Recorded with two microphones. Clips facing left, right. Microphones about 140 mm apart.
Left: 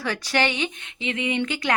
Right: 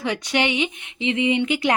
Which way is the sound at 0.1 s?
20° right (ahead or behind).